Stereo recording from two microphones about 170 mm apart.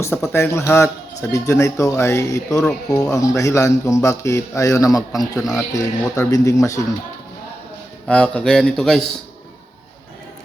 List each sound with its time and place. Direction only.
0.0 s speech: 15° left (ahead or behind)
5.4 s a man's voice: centre (ahead or behind)
5.7 s speech: 20° left (ahead or behind)
8.0 s a man's voice: 5° left (ahead or behind)